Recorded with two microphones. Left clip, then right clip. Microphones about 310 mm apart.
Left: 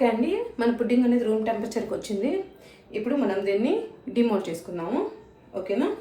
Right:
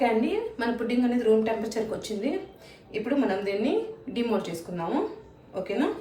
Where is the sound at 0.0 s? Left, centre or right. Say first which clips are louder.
Left 1 dB; centre.